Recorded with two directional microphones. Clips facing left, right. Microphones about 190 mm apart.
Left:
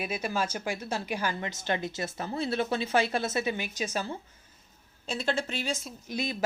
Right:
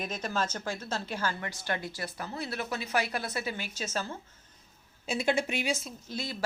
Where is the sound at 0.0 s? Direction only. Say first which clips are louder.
Left 2 dB; 10° left (ahead or behind).